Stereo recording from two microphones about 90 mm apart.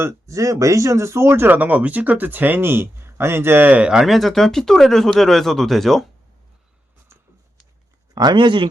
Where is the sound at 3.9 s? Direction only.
5° right (ahead or behind).